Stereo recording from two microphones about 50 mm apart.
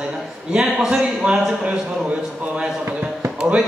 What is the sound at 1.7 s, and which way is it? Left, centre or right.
Speech, right.